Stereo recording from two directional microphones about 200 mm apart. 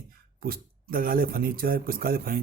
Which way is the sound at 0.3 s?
45° right (ahead or behind).